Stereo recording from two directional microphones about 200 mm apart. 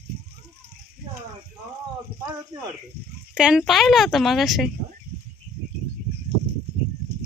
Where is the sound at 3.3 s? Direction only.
5° right (ahead or behind).